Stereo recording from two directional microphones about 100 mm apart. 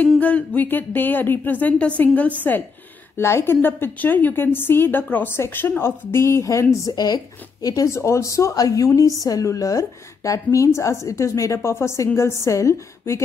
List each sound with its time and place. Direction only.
0.2 s speech: 15° left (ahead or behind)
3.2 s a woman's voice: 25° left (ahead or behind)